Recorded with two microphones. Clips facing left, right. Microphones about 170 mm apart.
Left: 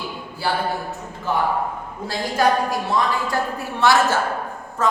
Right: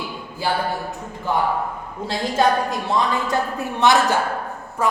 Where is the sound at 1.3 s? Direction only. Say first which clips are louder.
Right 1 dB; 15° right (ahead or behind).